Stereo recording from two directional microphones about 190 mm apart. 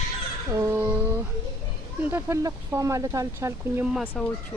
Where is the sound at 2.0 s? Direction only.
15° right (ahead or behind).